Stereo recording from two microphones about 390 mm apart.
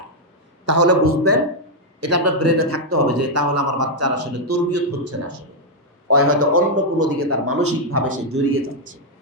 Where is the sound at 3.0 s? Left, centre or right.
Right.